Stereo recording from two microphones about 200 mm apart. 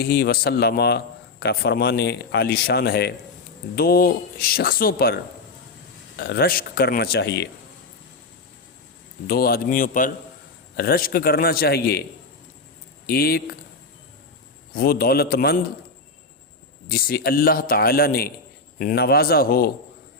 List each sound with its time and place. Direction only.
0.0 s a man's voice: 50° left (ahead or behind)
9.2 s a man's voice: 50° left (ahead or behind)
13.1 s a man's voice: 50° left (ahead or behind)
14.7 s a man's voice: 45° left (ahead or behind)
16.9 s a man's voice: 50° left (ahead or behind)